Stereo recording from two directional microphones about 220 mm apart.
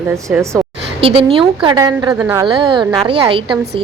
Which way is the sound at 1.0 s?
25° right (ahead or behind).